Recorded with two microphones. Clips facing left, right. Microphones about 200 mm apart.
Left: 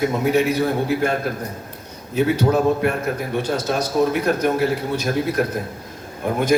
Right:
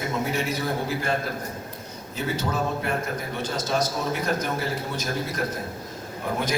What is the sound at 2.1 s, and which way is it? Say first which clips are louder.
A man's voice: left 10 dB; 60° left (ahead or behind).